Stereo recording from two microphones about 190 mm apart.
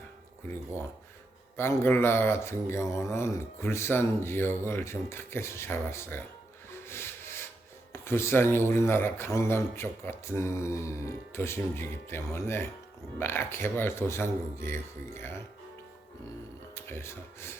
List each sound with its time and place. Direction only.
1.5 s speech: 10° left (ahead or behind)
6.7 s rub: 15° left (ahead or behind)
8.0 s speech: 10° left (ahead or behind)
16.7 s speech: 10° left (ahead or behind)